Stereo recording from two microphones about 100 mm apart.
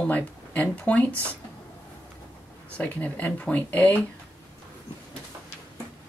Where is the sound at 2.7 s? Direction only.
15° left (ahead or behind).